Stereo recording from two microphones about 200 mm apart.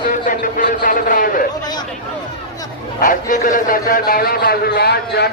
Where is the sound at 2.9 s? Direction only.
40° left (ahead or behind).